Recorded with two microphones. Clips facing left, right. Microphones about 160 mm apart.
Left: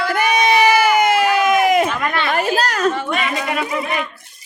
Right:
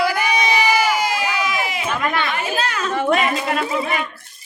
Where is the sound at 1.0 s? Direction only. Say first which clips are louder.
Left 7 dB; 55° left (ahead or behind).